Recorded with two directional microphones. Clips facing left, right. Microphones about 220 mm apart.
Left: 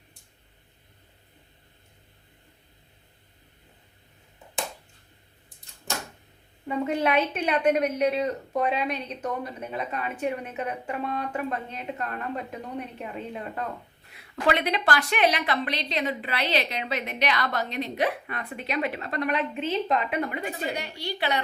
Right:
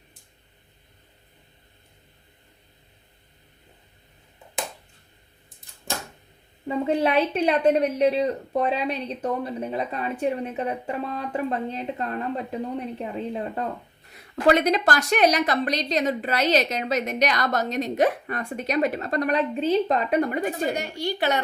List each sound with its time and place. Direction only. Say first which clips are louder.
6.7 s a woman's voice: right 3 dB; 30° right (ahead or behind)